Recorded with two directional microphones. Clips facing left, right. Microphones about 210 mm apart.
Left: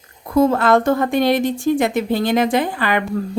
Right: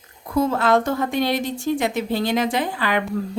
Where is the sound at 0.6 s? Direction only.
55° left (ahead or behind).